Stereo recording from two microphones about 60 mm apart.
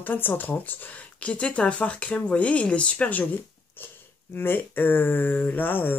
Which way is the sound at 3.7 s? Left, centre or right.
Left.